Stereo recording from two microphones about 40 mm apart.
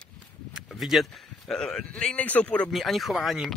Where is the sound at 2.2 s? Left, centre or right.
Left.